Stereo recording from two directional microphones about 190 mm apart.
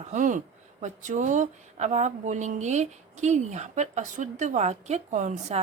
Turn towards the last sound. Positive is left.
turn(degrees=-40)  # may be behind; listen again after turning